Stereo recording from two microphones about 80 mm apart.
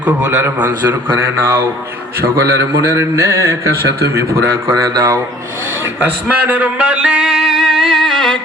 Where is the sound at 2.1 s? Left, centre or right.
Right.